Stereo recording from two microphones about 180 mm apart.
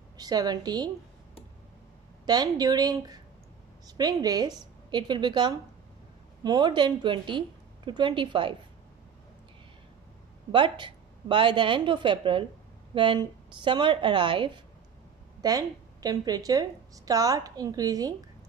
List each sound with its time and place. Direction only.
0.2 s a woman's voice: 20° right (ahead or behind)
2.2 s a woman's voice: 20° right (ahead or behind)
10.5 s a woman's voice: 25° right (ahead or behind)